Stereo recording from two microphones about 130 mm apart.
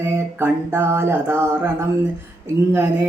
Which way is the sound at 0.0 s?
20° right (ahead or behind).